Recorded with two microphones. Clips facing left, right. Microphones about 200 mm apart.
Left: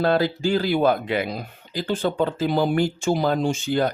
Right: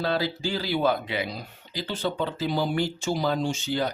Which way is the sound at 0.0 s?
50° left (ahead or behind).